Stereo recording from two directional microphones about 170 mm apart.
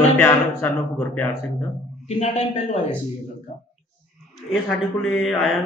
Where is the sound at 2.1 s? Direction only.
40° left (ahead or behind).